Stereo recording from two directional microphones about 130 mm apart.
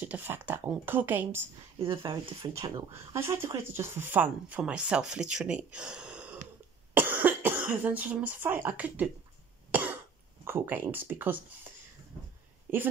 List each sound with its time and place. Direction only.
0.0 s speech: 15° right (ahead or behind)
1.8 s speech: 45° right (ahead or behind)
2.9 s speech: 20° right (ahead or behind)
9.7 s cough: 15° right (ahead or behind)
10.4 s speech: 20° right (ahead or behind)